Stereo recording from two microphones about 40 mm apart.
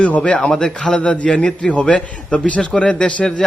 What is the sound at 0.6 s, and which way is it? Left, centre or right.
A man's voice, left.